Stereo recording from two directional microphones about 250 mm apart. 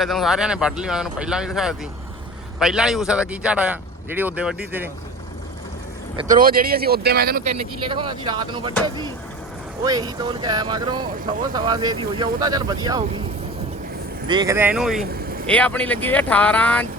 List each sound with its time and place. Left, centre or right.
0.0 s speech: centre
6.1 s speech: right
7.9 s speech: centre
9.8 s speech: centre
14.3 s speech: centre